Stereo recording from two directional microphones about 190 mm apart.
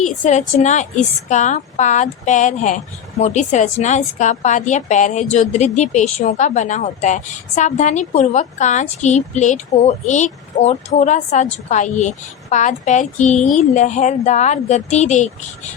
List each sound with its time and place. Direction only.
0.0 s a woman's voice: 40° left (ahead or behind)